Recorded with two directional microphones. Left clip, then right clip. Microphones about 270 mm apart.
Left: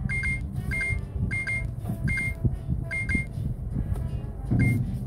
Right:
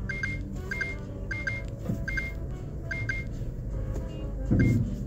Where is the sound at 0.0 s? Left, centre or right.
Centre.